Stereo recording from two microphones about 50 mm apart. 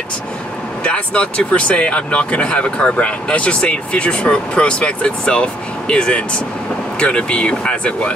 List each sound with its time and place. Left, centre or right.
0.8 s speech: left